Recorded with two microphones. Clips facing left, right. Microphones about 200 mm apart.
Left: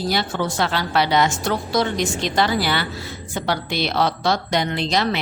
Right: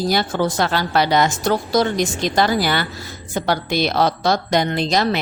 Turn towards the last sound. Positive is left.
turn(degrees=-45)  # may be behind; listen again after turning